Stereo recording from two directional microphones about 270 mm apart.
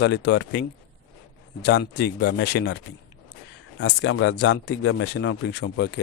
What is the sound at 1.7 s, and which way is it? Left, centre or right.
Speech, left.